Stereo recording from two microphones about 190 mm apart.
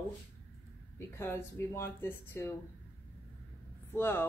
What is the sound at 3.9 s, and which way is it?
Speech, 15° left (ahead or behind).